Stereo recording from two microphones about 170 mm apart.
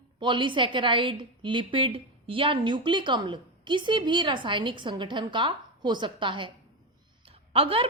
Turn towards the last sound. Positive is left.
turn(degrees=-35)  # may be behind; listen again after turning